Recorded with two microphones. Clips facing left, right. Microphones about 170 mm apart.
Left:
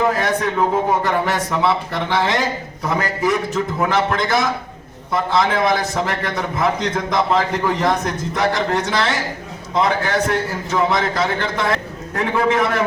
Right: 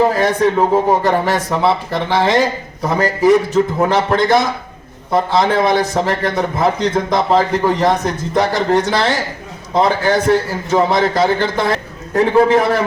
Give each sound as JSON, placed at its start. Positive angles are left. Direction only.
{"t": 0.0, "sound": "a man's voice", "side_deg": -35}